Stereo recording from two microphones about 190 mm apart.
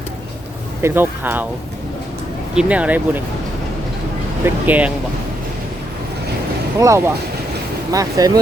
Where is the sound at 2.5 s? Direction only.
5° right (ahead or behind).